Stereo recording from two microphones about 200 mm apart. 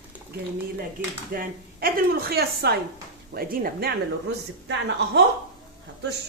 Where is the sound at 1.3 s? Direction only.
45° right (ahead or behind).